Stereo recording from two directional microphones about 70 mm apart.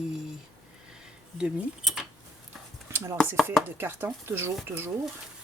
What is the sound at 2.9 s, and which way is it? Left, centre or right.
Chopping, right.